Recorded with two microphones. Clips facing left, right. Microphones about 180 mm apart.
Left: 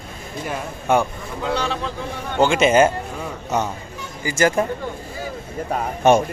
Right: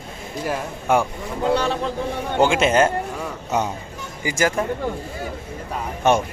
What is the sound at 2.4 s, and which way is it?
Speech, 5° right (ahead or behind).